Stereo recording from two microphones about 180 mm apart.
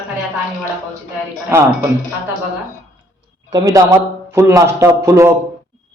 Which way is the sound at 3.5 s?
20° right (ahead or behind).